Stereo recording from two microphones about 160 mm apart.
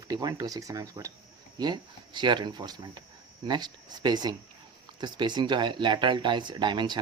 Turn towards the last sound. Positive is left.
turn(degrees=-30)  # may be behind; listen again after turning